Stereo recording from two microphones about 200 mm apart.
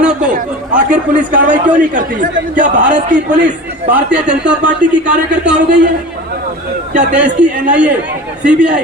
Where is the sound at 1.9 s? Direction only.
40° right (ahead or behind).